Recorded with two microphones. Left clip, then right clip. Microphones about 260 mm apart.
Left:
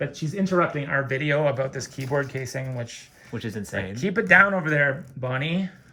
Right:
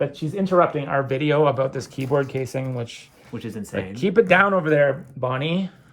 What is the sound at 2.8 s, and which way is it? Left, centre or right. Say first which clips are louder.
Speech: right 4 dB; centre.